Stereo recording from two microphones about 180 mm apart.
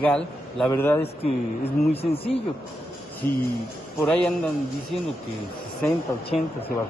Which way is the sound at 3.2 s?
15° left (ahead or behind).